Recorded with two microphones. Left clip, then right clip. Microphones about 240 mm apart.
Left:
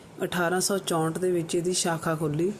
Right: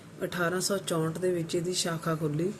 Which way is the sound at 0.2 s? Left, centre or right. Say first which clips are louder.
Left 4 dB; centre.